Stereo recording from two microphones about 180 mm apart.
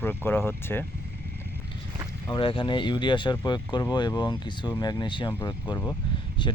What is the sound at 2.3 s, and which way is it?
Speech, 30° left (ahead or behind).